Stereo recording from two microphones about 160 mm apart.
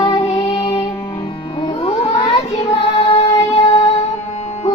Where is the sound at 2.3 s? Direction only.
35° left (ahead or behind).